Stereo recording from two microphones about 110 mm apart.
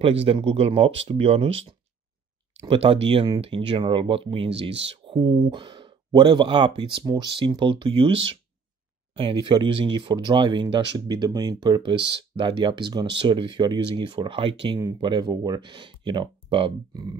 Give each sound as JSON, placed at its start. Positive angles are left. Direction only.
{"t": 0.0, "sound": "speech", "side_deg": -60}
{"t": 14.8, "sound": "speech", "side_deg": -40}